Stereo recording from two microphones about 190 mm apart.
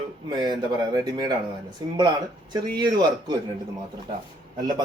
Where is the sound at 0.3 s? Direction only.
20° right (ahead or behind).